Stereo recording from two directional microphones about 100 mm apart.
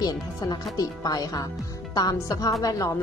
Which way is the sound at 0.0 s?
40° left (ahead or behind).